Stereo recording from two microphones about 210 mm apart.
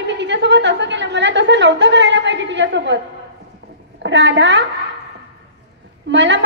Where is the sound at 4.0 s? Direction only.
60° right (ahead or behind).